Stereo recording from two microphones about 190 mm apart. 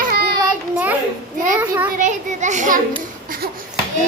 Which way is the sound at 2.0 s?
40° right (ahead or behind).